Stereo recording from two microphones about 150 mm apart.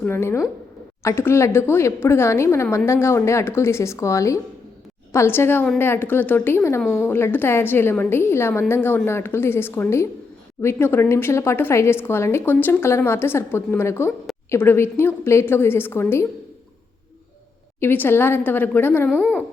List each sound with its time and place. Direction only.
0.0 s speech: 15° left (ahead or behind)
17.7 s speech: 15° left (ahead or behind)